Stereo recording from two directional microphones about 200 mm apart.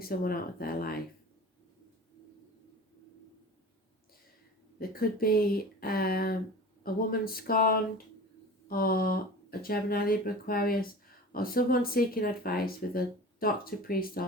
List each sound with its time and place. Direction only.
0.0 s speech: 50° left (ahead or behind)
4.8 s speech: 45° left (ahead or behind)